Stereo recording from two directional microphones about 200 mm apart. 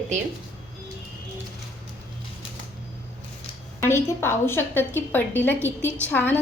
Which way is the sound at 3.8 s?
15° left (ahead or behind).